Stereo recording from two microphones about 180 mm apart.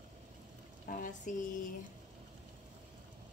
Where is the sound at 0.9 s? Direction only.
45° left (ahead or behind).